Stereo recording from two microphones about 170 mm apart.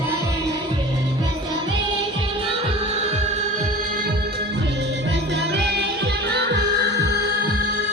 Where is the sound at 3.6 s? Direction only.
60° right (ahead or behind).